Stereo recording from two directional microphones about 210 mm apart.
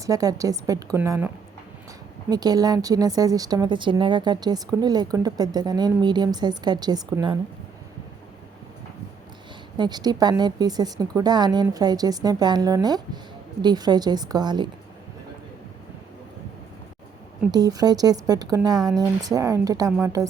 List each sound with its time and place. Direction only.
0.0 s speech: 15° right (ahead or behind)
2.3 s a woman's voice: 20° right (ahead or behind)
9.7 s a woman's voice: 20° right (ahead or behind)
17.5 s speech: 15° right (ahead or behind)